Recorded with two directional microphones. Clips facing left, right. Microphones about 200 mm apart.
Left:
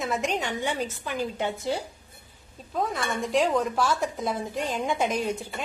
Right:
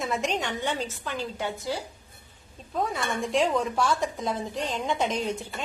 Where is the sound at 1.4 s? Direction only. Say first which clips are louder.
Left 3 dB; 25° left (ahead or behind).